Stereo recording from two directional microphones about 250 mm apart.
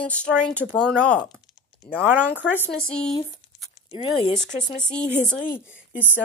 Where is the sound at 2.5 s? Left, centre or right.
Centre.